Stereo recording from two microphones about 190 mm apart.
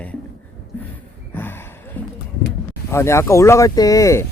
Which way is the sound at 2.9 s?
15° left (ahead or behind).